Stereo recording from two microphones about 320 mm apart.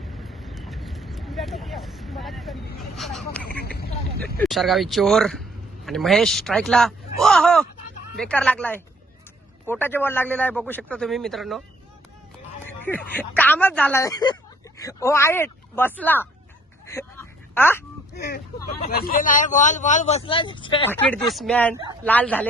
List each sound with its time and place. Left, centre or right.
0.1 s vehicle: centre
3.6 s speech: left
4.4 s a man's voice: centre
12.6 s speech: centre
16.8 s a sound: centre
18.8 s a man's voice: left; by 22.4 s centre